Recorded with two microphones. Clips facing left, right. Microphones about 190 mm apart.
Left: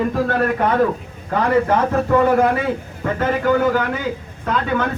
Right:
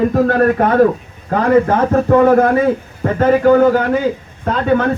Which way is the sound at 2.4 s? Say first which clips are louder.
Right 5 dB; 40° right (ahead or behind).